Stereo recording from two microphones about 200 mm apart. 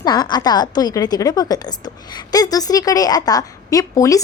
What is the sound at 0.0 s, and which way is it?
A woman's voice, 20° left (ahead or behind).